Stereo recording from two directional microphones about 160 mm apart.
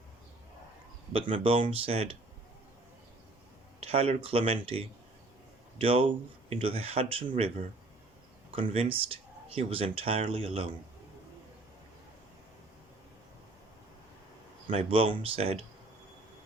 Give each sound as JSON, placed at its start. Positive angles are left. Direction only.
{"t": 1.1, "sound": "speech", "side_deg": -35}
{"t": 3.8, "sound": "speech", "side_deg": -40}
{"t": 8.5, "sound": "speech", "side_deg": -35}
{"t": 14.7, "sound": "speech", "side_deg": -35}